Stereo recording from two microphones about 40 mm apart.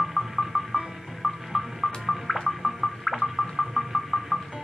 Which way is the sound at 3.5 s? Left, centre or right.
Centre.